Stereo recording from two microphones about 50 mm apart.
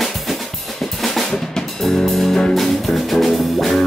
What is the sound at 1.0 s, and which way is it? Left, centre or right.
Drum kit, centre.